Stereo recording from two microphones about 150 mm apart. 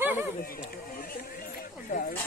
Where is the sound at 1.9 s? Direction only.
70° left (ahead or behind).